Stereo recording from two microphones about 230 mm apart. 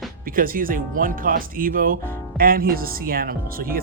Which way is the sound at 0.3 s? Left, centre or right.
Right.